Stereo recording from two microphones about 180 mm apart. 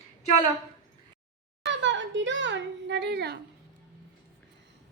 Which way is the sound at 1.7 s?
90° right.